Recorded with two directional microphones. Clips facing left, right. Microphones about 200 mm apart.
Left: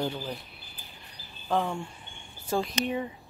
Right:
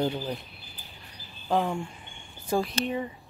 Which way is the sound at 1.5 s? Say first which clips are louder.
Right 2 dB; 15° right (ahead or behind).